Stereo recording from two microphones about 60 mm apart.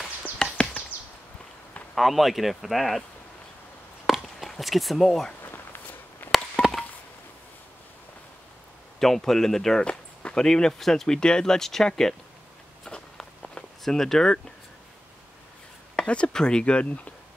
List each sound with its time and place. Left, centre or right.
0.4 s chop: centre
2.0 s speech: centre
4.0 s chop: centre
5.4 s a sound: left
6.6 s a sound: centre
9.0 s speech: centre
12.8 s walk: centre
13.8 s speech: centre
16.0 s speech: centre